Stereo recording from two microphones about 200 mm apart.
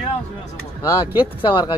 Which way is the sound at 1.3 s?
20° left (ahead or behind).